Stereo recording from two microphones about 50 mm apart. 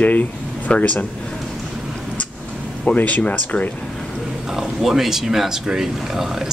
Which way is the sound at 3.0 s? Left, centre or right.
Left.